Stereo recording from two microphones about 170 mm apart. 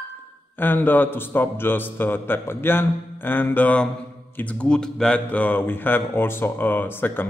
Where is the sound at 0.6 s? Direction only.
10° left (ahead or behind).